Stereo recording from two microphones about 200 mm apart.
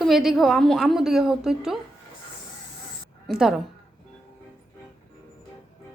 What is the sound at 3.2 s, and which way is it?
Speech, centre (ahead or behind).